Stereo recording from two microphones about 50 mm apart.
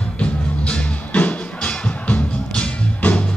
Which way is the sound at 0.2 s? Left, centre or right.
Left.